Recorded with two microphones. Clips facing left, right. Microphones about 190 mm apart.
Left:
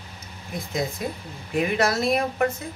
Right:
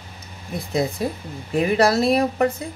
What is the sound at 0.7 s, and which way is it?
Speech, 30° right (ahead or behind).